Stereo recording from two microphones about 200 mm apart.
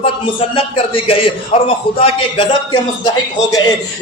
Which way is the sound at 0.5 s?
25° left (ahead or behind).